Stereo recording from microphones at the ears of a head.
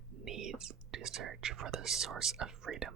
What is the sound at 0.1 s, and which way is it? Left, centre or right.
Speech, right.